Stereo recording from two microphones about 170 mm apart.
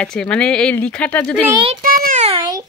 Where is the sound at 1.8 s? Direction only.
55° right (ahead or behind).